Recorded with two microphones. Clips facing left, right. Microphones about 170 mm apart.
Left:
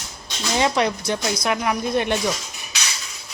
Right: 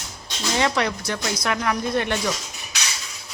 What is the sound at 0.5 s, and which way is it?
Speech, 20° left (ahead or behind).